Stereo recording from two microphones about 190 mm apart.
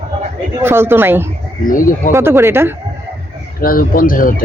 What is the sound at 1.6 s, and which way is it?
Speech, 45° left (ahead or behind).